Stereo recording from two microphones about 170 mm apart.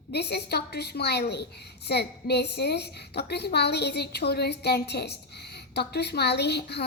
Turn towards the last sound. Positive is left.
turn(degrees=75)  # may be behind; listen again after turning